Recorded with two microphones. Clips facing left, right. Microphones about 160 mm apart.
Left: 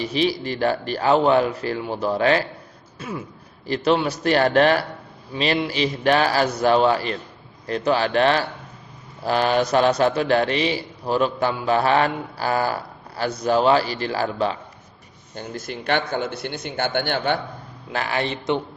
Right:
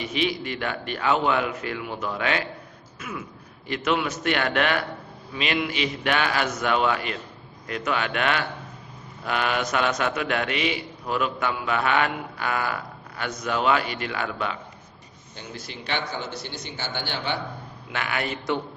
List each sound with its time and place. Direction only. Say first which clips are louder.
0.0 s a man's voice: left 4 dB; 35° left (ahead or behind)
15.4 s a man's voice: left 7 dB; 50° left (ahead or behind)
17.9 s a man's voice: left 4 dB; 35° left (ahead or behind)